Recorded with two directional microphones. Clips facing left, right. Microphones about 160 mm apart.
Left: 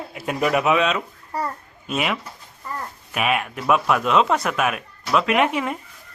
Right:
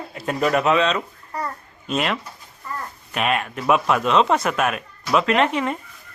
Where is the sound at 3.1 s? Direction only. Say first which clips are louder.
Even; 5° left (ahead or behind).